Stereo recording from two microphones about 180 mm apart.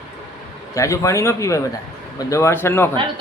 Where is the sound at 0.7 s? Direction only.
15° left (ahead or behind).